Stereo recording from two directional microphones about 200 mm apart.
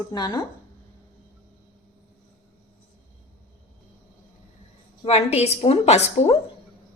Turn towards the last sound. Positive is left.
turn(degrees=35)  # may be behind; listen again after turning